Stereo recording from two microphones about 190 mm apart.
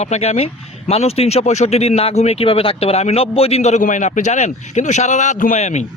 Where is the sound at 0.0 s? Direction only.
35° left (ahead or behind).